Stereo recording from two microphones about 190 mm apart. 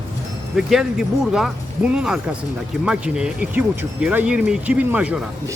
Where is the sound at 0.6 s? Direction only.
Centre (ahead or behind).